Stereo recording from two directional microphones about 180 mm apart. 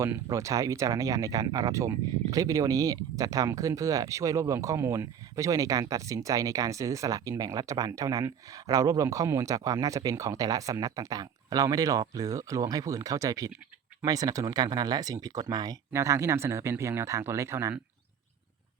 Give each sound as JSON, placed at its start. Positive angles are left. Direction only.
{"t": 0.0, "sound": "speech", "side_deg": -15}